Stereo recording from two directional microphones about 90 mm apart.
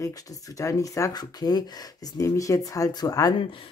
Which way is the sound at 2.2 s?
40° left (ahead or behind).